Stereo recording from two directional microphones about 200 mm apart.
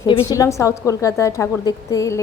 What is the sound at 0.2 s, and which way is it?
A woman's voice, 15° left (ahead or behind).